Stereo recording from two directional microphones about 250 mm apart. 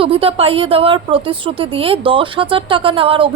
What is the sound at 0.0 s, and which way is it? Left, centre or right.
Speech, right.